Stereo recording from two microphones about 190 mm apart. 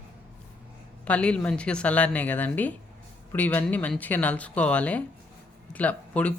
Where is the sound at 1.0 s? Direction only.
5° left (ahead or behind).